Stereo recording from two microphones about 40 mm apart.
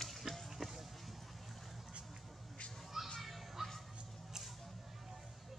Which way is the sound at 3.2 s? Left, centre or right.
Centre.